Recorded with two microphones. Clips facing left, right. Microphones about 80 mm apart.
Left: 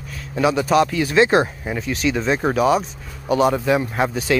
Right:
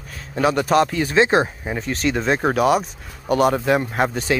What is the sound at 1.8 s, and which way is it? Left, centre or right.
Speech, right.